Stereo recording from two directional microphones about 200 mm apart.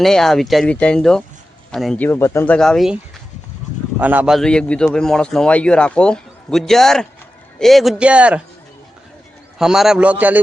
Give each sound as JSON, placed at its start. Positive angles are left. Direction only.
{"t": 0.0, "sound": "a man's voice", "side_deg": 0}
{"t": 2.0, "sound": "speech", "side_deg": 15}
{"t": 4.0, "sound": "a man's voice", "side_deg": -10}
{"t": 9.6, "sound": "a man's voice", "side_deg": 0}